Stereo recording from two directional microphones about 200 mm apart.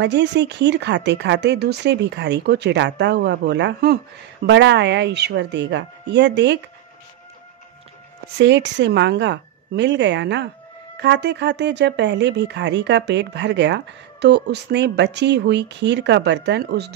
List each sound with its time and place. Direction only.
0.0 s speech: 60° right (ahead or behind)
8.4 s speech: 60° right (ahead or behind)